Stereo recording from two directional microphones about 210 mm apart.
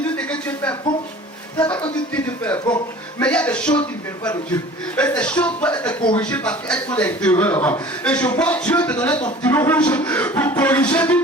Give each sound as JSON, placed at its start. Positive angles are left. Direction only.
{"t": 0.0, "sound": "a sound", "side_deg": 5}
{"t": 2.1, "sound": "speech", "side_deg": 5}
{"t": 4.9, "sound": "speech", "side_deg": 5}
{"t": 5.9, "sound": "speech", "side_deg": 20}
{"t": 6.1, "sound": "speech", "side_deg": 5}